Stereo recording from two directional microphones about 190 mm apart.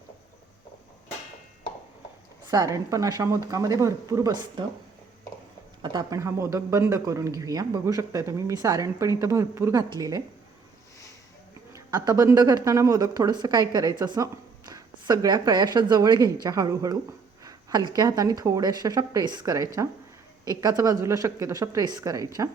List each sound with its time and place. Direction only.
2.5 s speech: 20° right (ahead or behind)
5.8 s speech: 20° right (ahead or behind)
11.7 s speech: 20° right (ahead or behind)